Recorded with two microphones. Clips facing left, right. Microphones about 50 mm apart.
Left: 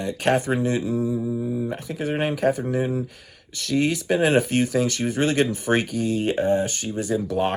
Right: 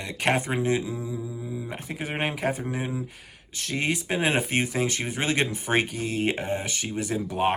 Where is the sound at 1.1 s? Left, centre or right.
Centre.